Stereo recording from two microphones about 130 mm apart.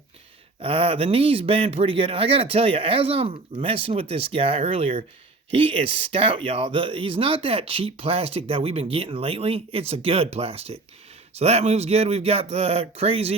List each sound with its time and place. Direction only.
0.6 s speech: 45° right (ahead or behind)